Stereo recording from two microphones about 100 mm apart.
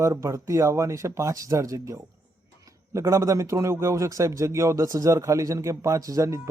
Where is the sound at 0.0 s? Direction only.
30° right (ahead or behind).